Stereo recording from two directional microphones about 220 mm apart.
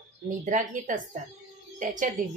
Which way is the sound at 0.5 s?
35° right (ahead or behind).